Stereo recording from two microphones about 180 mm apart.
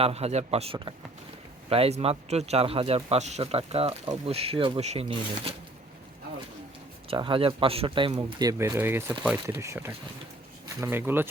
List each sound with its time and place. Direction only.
0.0 s speech: 35° right (ahead or behind)
7.1 s speech: 30° right (ahead or behind); by 11.3 s 10° right (ahead or behind)